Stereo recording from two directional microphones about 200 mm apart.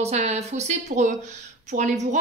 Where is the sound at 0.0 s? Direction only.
35° right (ahead or behind).